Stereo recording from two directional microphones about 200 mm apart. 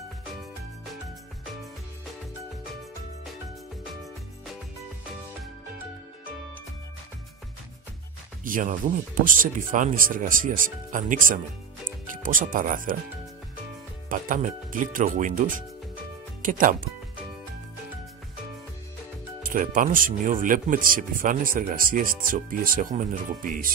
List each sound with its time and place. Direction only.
8.5 s speech: 40° right (ahead or behind)
14.0 s speech: 40° right (ahead or behind)
19.4 s speech: 40° right (ahead or behind)